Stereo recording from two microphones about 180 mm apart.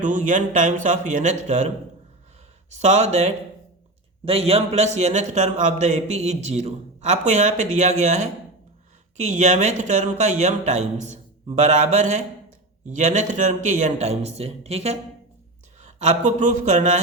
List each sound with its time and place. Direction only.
0.0 s speech: 45° right (ahead or behind)
2.7 s a man's voice: 40° right (ahead or behind)